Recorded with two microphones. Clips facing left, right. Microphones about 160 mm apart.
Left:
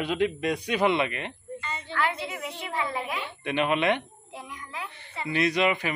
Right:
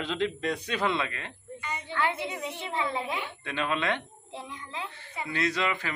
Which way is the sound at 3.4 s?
20° left (ahead or behind).